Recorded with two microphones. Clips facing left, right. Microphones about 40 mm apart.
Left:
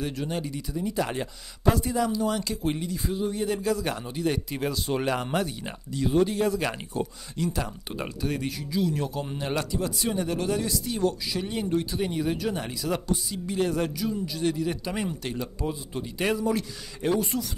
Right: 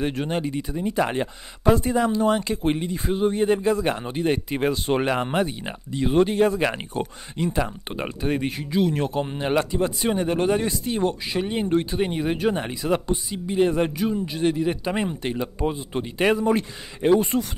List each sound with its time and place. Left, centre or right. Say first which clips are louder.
0.0 s speech: right 5 dB; right